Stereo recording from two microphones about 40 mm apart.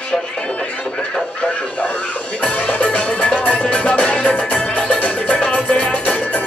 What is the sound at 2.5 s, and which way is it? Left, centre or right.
Music, left.